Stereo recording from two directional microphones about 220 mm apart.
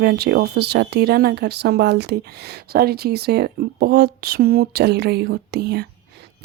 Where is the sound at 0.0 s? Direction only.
50° right (ahead or behind).